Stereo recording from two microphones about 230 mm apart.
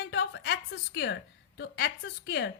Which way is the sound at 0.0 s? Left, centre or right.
Left.